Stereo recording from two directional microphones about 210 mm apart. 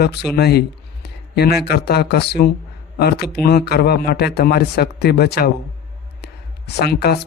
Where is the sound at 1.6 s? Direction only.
50° left (ahead or behind).